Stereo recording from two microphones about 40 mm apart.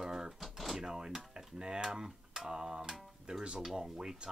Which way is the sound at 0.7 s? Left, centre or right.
Centre.